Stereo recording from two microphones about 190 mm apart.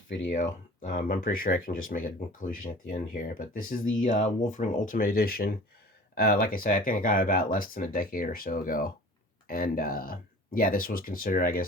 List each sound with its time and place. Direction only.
0.1 s speech: 75° left (ahead or behind)
0.8 s speech: 45° left (ahead or behind)